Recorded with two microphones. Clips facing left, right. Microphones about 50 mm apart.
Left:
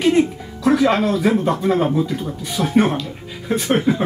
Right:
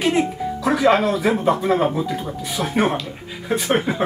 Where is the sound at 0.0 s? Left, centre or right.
Centre.